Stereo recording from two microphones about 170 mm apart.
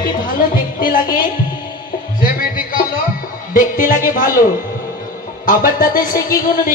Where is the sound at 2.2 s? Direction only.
55° left (ahead or behind).